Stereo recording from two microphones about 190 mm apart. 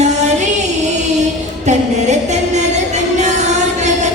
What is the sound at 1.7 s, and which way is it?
Music, 35° right (ahead or behind).